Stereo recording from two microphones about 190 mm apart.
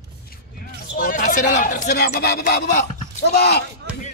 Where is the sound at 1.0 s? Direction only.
50° left (ahead or behind).